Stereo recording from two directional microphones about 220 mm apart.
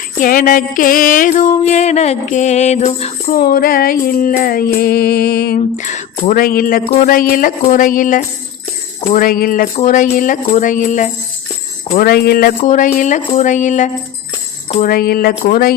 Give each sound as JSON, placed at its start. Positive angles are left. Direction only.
{"t": 0.2, "sound": "mantra", "side_deg": 40}
{"t": 5.5, "sound": "mantra", "side_deg": 35}